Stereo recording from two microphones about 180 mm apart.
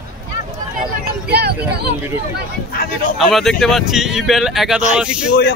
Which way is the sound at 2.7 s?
55° left (ahead or behind).